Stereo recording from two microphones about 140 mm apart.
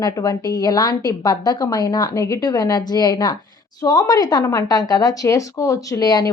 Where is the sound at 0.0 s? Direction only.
25° left (ahead or behind).